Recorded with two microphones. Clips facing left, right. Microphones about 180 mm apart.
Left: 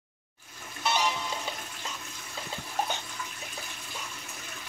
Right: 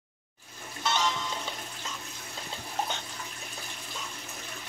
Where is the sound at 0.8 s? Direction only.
10° left (ahead or behind).